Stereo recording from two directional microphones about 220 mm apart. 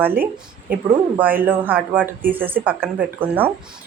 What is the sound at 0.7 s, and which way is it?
Speech, 40° right (ahead or behind).